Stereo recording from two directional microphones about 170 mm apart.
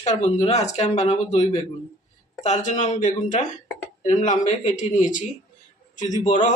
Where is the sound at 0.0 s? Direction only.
40° left (ahead or behind).